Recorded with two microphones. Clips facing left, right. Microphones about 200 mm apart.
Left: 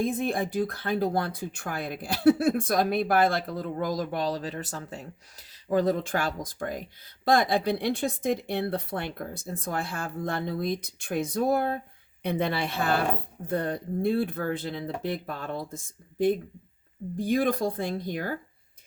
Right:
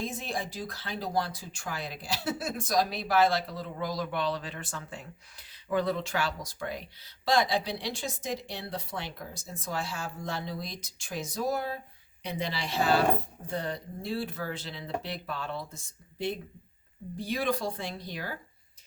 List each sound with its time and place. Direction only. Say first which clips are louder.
0.0 s speech: left 8 dB; 55° left (ahead or behind)